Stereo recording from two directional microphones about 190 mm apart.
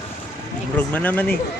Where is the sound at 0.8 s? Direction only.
10° left (ahead or behind).